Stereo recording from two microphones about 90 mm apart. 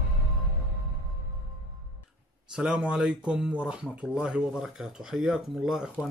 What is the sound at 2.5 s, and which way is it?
Speech, 10° right (ahead or behind).